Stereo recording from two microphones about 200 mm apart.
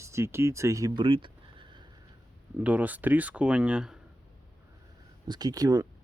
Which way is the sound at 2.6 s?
5° right (ahead or behind).